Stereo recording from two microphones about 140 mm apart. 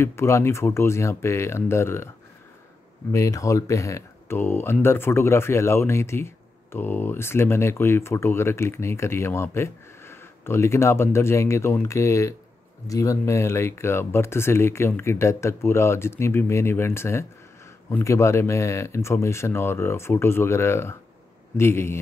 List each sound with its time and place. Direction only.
0.0 s speech: 20° left (ahead or behind)
3.1 s speech: 20° left (ahead or behind)